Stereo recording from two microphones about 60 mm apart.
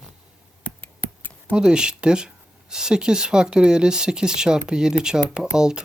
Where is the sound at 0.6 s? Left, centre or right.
Left.